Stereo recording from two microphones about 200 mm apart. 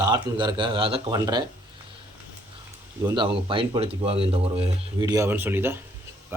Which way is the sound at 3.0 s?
15° right (ahead or behind).